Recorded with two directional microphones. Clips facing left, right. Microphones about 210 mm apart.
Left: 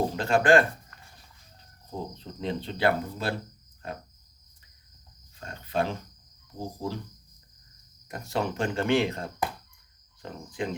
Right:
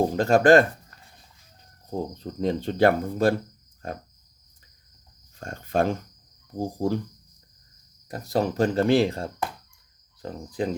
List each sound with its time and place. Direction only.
0.2 s speech: 40° right (ahead or behind)
1.9 s speech: 45° right (ahead or behind)
5.4 s speech: 45° right (ahead or behind)
8.0 s speech: 35° right (ahead or behind)